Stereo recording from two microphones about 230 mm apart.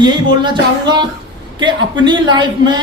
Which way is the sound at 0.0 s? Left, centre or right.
Centre.